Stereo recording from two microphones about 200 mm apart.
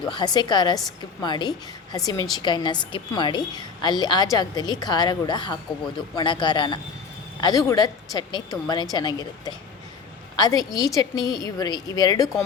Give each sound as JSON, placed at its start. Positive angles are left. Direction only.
{"t": 0.0, "sound": "a woman's voice", "side_deg": 20}